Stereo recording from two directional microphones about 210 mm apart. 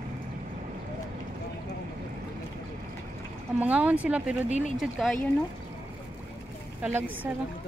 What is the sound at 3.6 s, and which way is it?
Speech, 5° right (ahead or behind).